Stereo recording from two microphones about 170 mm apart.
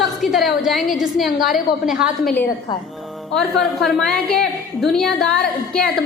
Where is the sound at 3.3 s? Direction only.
Centre (ahead or behind).